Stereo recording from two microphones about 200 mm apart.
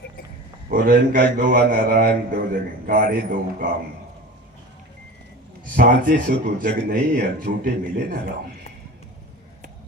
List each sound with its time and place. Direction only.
0.7 s a man's voice: 45° right (ahead or behind)
5.7 s a man's voice: 45° right (ahead or behind)